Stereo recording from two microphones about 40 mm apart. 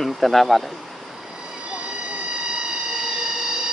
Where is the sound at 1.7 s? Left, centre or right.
Right.